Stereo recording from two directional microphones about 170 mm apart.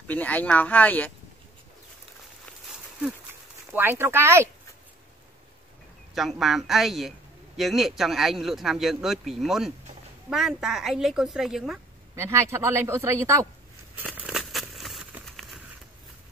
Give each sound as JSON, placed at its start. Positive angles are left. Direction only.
{"t": 0.0, "sound": "speech", "side_deg": 10}
{"t": 3.7, "sound": "speech", "side_deg": -15}
{"t": 6.1, "sound": "speech", "side_deg": 0}
{"t": 12.2, "sound": "speech", "side_deg": -15}
{"t": 13.9, "sound": "a sound", "side_deg": -10}